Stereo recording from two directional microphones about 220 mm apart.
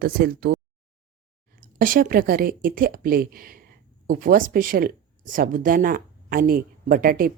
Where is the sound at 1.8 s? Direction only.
40° right (ahead or behind).